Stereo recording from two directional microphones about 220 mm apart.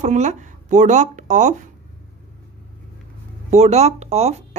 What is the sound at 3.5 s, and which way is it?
Speech, 30° right (ahead or behind).